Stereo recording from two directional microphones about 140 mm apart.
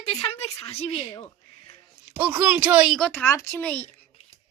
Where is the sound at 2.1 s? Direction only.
10° right (ahead or behind).